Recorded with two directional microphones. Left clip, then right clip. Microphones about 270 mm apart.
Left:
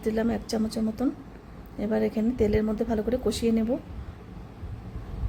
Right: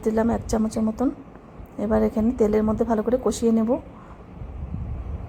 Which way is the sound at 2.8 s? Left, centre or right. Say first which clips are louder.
Right 5 dB; centre.